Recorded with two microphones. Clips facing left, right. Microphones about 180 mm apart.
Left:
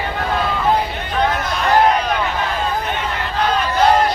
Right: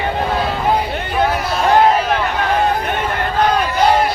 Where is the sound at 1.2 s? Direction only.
5° right (ahead or behind).